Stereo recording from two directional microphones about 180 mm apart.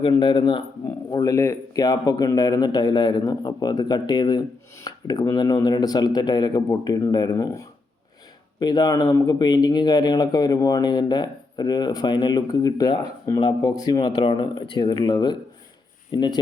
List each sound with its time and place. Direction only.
0.0 s speech: 25° left (ahead or behind)